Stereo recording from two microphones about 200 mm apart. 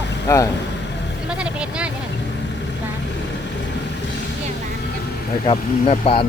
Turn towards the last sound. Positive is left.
turn(degrees=30)  # may be behind; listen again after turning